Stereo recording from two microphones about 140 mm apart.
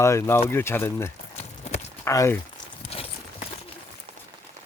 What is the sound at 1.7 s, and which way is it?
Walk, 50° left (ahead or behind).